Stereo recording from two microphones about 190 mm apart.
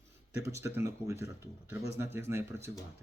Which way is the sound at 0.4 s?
15° right (ahead or behind).